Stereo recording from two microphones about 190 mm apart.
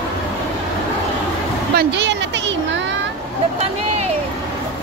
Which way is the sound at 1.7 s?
70° right (ahead or behind).